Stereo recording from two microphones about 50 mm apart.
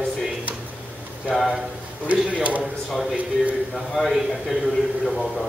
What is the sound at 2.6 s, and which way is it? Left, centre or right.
A man's voice, centre.